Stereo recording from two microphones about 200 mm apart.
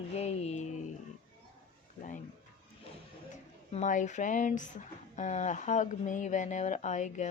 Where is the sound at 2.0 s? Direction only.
40° left (ahead or behind).